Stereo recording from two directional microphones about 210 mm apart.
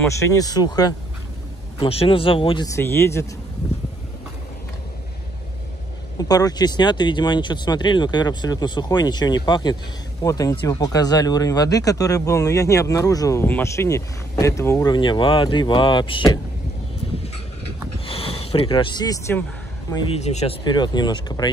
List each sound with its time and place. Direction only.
0.2 s speech: 15° left (ahead or behind)
6.1 s speech: 20° left (ahead or behind)
18.0 s speech: 25° left (ahead or behind)
19.9 s speech: 30° left (ahead or behind)